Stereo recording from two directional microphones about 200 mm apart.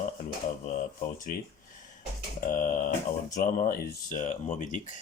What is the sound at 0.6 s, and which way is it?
Speech, 40° left (ahead or behind).